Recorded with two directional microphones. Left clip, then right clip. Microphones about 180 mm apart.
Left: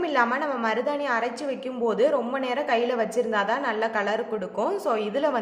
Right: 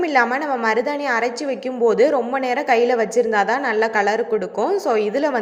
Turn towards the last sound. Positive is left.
turn(degrees=-25)  # may be behind; listen again after turning